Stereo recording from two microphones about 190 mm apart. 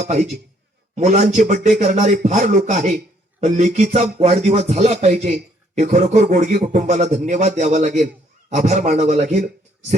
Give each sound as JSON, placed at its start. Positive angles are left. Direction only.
{"t": 0.9, "sound": "speech", "side_deg": -40}